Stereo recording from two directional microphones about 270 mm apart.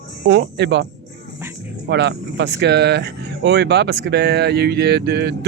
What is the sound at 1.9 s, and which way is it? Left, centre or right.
Speech, right.